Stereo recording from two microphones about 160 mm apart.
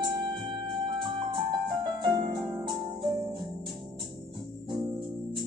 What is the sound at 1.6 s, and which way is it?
Music, 30° right (ahead or behind).